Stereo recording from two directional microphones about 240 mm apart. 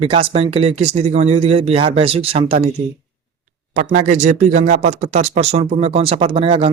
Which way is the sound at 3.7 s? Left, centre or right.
Right.